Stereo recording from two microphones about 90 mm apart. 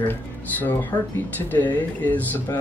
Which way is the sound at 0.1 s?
20° left (ahead or behind).